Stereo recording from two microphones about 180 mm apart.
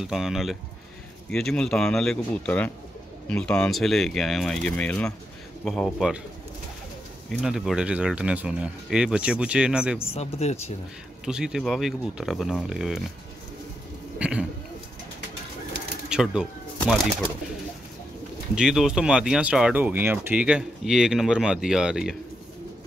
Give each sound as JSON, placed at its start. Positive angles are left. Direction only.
{"t": 0.0, "sound": "speech", "side_deg": 0}
{"t": 7.4, "sound": "speech", "side_deg": -5}
{"t": 10.1, "sound": "speech", "side_deg": 35}
{"t": 11.2, "sound": "speech", "side_deg": -5}
{"t": 14.1, "sound": "a sound", "side_deg": -5}
{"t": 16.1, "sound": "speech", "side_deg": -5}
{"t": 18.5, "sound": "speech", "side_deg": -5}